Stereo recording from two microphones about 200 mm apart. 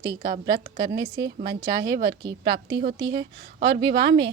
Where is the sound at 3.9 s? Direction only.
55° right (ahead or behind).